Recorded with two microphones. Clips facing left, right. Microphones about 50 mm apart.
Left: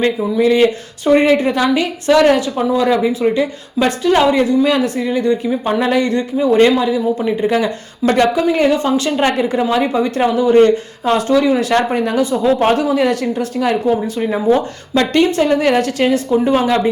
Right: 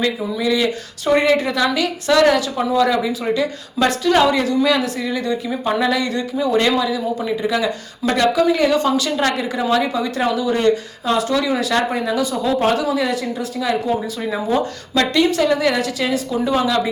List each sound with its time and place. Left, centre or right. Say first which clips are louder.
0.0 s speech: left 6 dB; left
1.1 s a woman's voice: left 4 dB; left
14.2 s speech: left 5 dB; left